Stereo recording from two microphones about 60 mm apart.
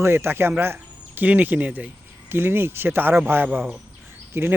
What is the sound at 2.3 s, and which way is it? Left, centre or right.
Speech, right.